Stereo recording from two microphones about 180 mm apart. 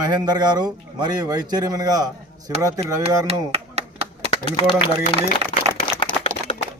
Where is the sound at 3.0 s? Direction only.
35° right (ahead or behind).